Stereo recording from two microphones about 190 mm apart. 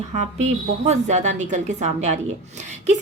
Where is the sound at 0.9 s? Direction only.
40° right (ahead or behind).